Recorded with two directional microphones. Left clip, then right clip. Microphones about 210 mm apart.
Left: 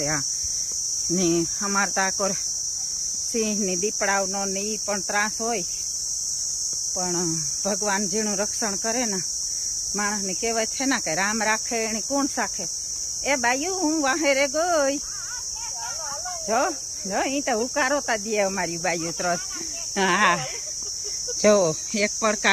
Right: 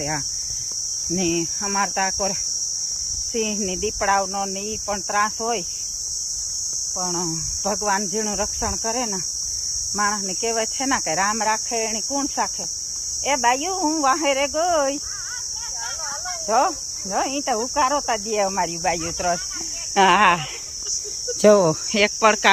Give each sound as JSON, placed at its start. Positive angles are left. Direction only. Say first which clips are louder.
{"t": 1.1, "sound": "cricket", "louder": "even", "side_deg": 10}
{"t": 3.3, "sound": "speech", "louder": "even", "side_deg": 5}
{"t": 7.0, "sound": "speech", "louder": "even", "side_deg": 0}
{"t": 16.5, "sound": "speech", "louder": "right 4 dB", "side_deg": 0}
{"t": 20.0, "sound": "speech", "louder": "right 5 dB", "side_deg": -15}
{"t": 21.4, "sound": "cricket", "louder": "right 4 dB", "side_deg": -30}
{"t": 21.9, "sound": "speech", "louder": "right 8 dB", "side_deg": -10}